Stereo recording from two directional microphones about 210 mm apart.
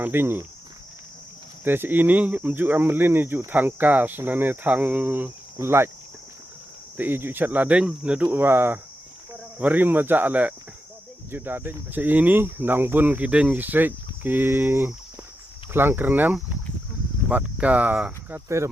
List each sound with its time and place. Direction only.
0.0 s speech: 10° right (ahead or behind)
1.6 s speech: 10° right (ahead or behind)
6.9 s speech: 10° right (ahead or behind)